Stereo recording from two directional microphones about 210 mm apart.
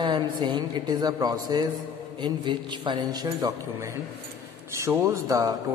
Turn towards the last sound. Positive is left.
turn(degrees=-15)  # may be behind; listen again after turning